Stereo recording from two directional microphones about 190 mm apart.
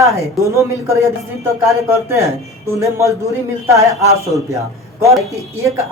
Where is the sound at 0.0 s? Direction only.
15° right (ahead or behind).